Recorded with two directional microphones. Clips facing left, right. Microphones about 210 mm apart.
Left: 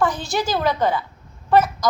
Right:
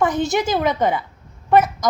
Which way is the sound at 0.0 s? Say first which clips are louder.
Right 3 dB; 20° right (ahead or behind).